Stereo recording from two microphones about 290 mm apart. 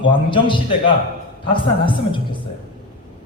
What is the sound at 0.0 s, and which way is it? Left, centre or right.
Speech, centre.